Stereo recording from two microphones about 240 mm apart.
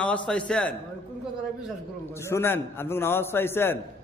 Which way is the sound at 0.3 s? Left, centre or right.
Centre.